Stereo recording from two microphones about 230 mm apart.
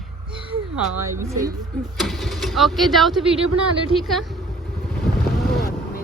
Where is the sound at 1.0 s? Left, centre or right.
Centre.